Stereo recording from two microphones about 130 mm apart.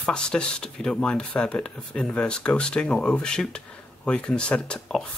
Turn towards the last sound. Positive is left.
turn(degrees=5)  # may be behind; listen again after turning